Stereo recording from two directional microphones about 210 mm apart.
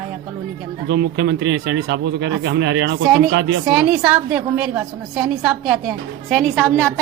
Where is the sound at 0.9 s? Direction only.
50° right (ahead or behind).